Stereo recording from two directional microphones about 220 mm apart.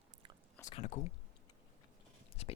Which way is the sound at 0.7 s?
30° left (ahead or behind).